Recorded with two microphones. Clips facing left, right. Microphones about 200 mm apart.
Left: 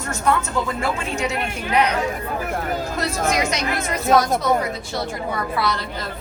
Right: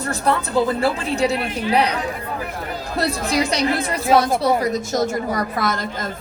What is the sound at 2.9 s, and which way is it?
A woman's voice, 35° right (ahead or behind).